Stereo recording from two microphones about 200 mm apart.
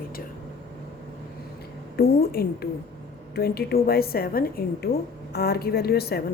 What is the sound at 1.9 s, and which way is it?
Speech, 50° left (ahead or behind).